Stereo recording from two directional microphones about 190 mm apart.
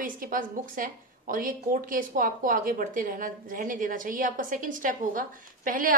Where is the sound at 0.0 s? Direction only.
45° right (ahead or behind).